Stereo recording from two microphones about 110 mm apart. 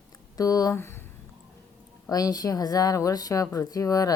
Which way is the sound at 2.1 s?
35° left (ahead or behind).